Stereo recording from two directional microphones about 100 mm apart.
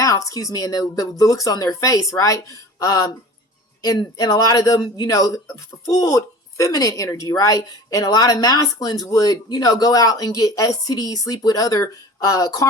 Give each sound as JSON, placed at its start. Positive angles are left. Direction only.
{"t": 0.0, "sound": "speech", "side_deg": 35}